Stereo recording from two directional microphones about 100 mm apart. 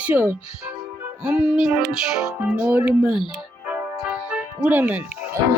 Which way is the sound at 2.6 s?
15° right (ahead or behind).